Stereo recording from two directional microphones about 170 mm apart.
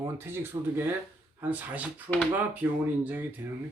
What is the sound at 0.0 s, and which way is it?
Speech, 15° right (ahead or behind).